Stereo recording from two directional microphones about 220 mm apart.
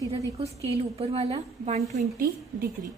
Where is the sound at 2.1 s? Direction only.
40° right (ahead or behind).